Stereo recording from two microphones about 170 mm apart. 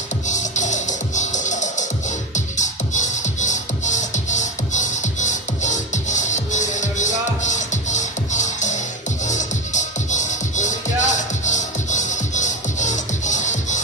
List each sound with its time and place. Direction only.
0.3 s music: 45° left (ahead or behind)